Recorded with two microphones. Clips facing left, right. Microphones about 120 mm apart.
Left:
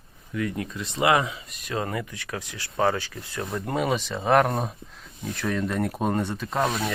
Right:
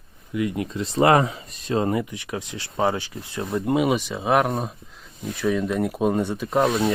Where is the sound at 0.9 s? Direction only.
40° right (ahead or behind); by 6.9 s 5° right (ahead or behind).